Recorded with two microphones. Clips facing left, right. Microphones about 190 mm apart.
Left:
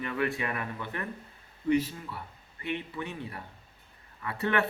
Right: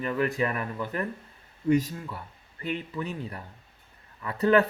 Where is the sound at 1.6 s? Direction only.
45° right (ahead or behind).